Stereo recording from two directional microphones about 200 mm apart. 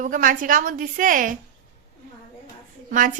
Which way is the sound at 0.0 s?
40° right (ahead or behind).